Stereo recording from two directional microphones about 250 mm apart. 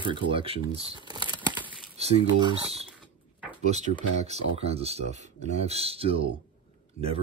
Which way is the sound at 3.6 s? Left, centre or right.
Right.